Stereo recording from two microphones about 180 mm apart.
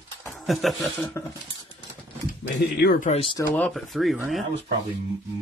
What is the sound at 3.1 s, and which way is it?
Speech, 30° left (ahead or behind).